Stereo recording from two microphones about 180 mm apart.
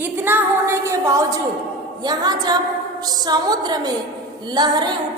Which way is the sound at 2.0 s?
25° right (ahead or behind).